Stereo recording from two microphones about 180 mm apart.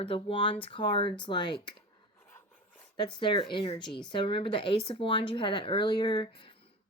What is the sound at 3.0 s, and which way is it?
Speech, 25° left (ahead or behind).